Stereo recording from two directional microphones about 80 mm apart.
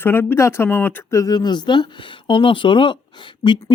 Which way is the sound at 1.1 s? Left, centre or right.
Left.